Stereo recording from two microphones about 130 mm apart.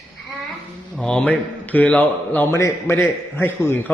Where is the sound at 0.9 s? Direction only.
10° left (ahead or behind).